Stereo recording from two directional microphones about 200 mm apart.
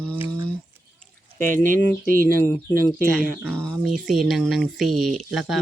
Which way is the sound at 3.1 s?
5° right (ahead or behind).